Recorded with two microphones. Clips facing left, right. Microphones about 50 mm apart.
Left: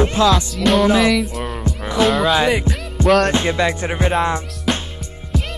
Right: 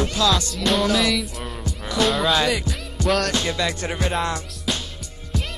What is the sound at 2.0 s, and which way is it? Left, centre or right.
Speech, centre.